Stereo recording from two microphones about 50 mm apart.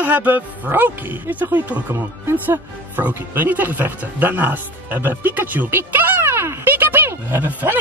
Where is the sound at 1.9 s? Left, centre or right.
Right.